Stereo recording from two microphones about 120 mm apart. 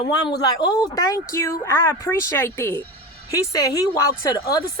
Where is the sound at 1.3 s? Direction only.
25° left (ahead or behind).